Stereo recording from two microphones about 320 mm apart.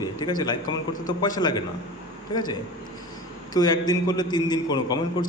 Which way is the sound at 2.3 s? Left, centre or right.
Left.